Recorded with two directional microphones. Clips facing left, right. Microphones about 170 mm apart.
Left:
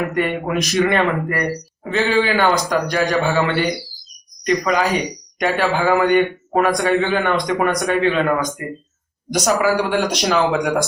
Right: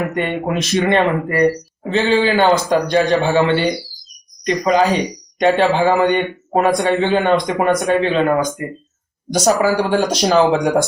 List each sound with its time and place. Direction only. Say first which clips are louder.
0.1 s a man's voice: even; 25° right (ahead or behind)